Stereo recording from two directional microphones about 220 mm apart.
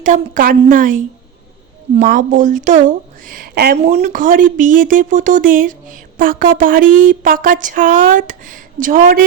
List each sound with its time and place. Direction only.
0.0 s speech: 35° right (ahead or behind)
3.8 s speech: 30° right (ahead or behind)